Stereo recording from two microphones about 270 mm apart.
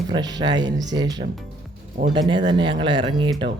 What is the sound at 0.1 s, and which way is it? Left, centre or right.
Speech, centre.